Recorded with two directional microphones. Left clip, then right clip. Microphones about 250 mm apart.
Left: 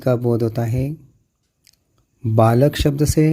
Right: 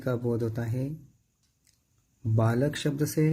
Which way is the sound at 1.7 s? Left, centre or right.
Left.